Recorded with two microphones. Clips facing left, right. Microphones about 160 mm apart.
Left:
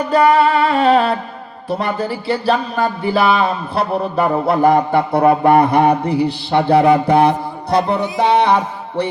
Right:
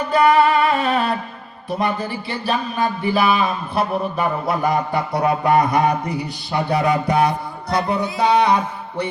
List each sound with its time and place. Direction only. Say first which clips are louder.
0.1 s mantra: left 2 dB; 30° left (ahead or behind)
1.7 s speech: left 2 dB; 30° left (ahead or behind)
4.4 s a sound: left 7 dB; 55° left (ahead or behind)
5.1 s a man's voice: left 7 dB; 50° left (ahead or behind)
5.5 s mantra: left 4 dB; 30° left (ahead or behind)